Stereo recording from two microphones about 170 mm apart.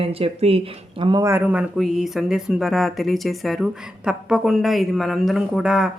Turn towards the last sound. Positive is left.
turn(degrees=-5)  # may be behind; listen again after turning